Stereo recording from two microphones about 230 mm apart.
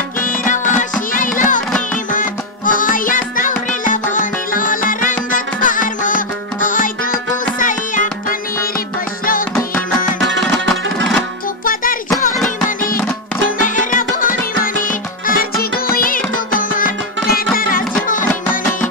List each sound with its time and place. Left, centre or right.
0.2 s music: left
9.6 s music: centre
11.6 s music: left
13.6 s music: left